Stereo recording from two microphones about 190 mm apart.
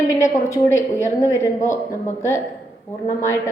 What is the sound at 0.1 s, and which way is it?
A woman's voice, 15° left (ahead or behind).